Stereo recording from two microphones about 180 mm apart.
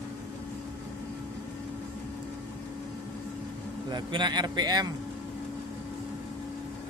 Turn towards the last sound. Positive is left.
turn(degrees=-25)  # may be behind; listen again after turning